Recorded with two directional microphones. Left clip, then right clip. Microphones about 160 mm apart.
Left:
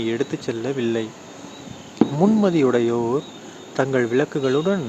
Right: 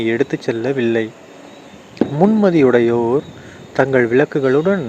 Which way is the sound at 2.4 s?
25° right (ahead or behind).